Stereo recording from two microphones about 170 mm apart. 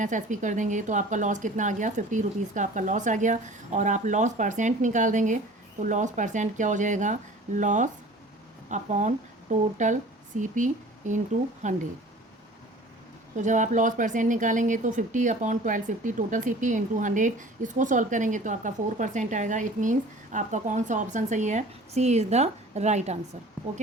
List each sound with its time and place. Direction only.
0.0 s speech: 45° right (ahead or behind)
13.3 s speech: 45° right (ahead or behind)